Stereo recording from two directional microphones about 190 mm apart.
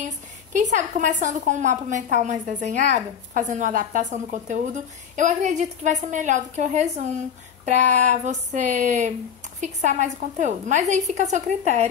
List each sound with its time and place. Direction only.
0.0 s a woman's voice: 40° right (ahead or behind)